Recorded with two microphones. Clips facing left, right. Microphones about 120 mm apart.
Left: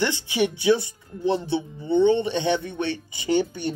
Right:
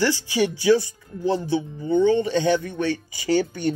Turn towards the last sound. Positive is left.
turn(degrees=20)  # may be behind; listen again after turning